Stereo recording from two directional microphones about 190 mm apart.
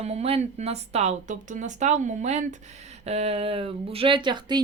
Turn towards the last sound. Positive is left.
turn(degrees=-25)  # may be behind; listen again after turning